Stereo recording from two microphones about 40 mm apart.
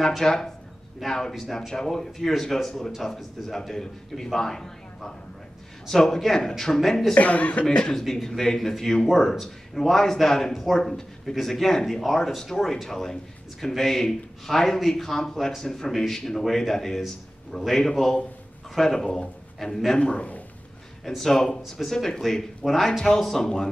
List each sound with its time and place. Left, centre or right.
0.0 s speech: centre
7.2 s speech: left
7.9 s a man's voice: centre
20.0 s a man's voice: left
21.1 s speech: centre